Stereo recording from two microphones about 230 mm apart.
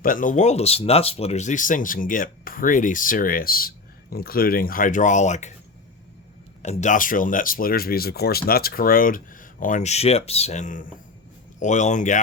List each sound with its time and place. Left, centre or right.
0.0 s speech: left
6.6 s speech: left